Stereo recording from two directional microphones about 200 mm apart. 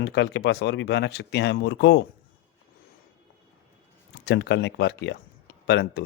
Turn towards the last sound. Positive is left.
turn(degrees=55)  # may be behind; listen again after turning